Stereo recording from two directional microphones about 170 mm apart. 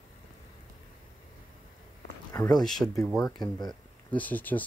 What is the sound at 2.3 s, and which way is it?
Speech, 20° left (ahead or behind).